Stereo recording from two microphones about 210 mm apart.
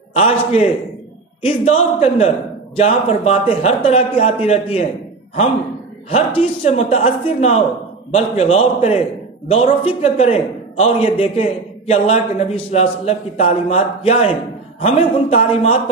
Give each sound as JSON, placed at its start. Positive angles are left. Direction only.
{"t": 0.1, "sound": "a man's voice", "side_deg": 30}
{"t": 6.0, "sound": "a man's voice", "side_deg": 30}